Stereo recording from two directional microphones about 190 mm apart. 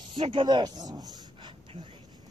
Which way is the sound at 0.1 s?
25° right (ahead or behind).